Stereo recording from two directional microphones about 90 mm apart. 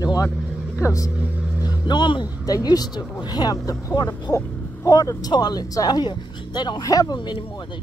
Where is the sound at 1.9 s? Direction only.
60° left (ahead or behind).